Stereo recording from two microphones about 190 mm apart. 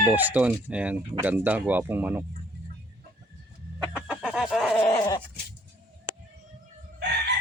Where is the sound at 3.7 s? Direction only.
5° right (ahead or behind).